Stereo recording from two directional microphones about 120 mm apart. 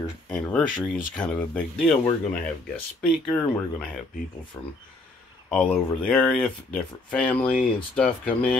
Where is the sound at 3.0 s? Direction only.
5° left (ahead or behind).